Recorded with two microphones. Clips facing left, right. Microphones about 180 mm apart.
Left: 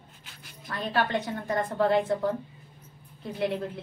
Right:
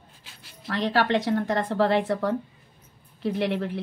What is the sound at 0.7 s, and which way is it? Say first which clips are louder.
A woman's voice: right 5 dB; 80° right.